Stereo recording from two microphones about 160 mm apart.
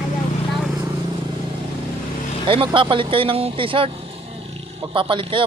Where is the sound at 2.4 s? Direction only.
35° right (ahead or behind).